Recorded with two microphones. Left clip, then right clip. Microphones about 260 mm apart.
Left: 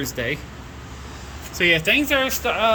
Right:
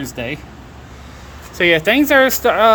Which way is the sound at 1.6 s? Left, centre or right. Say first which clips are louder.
Right 5 dB; centre.